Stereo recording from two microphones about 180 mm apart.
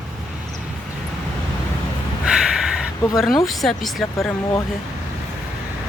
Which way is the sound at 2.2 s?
5° right (ahead or behind).